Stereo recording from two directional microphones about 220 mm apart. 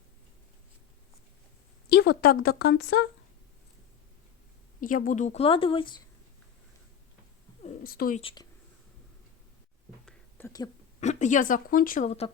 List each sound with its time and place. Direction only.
1.9 s speech: 45° left (ahead or behind)
4.8 s speech: 35° left (ahead or behind)
7.6 s a sound: 40° left (ahead or behind)
8.2 s speech: 25° left (ahead or behind)
10.1 s a sound: 10° left (ahead or behind)
11.0 s speech: 35° left (ahead or behind)